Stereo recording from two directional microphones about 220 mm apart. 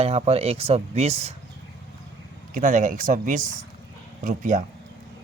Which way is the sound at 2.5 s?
35° right (ahead or behind).